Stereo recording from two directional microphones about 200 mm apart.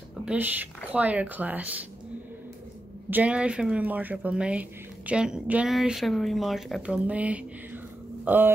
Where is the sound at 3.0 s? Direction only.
10° right (ahead or behind).